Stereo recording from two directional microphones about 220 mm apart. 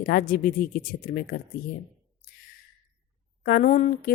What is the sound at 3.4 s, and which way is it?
Speech, 40° left (ahead or behind).